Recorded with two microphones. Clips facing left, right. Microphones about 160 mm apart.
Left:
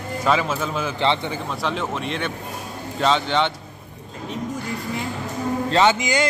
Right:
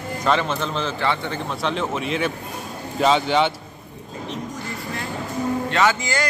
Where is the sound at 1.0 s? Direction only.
20° left (ahead or behind).